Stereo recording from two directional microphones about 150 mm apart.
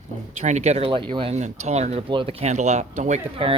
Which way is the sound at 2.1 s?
35° right (ahead or behind).